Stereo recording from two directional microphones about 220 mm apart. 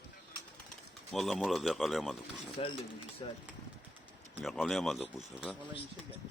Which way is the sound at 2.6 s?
25° left (ahead or behind).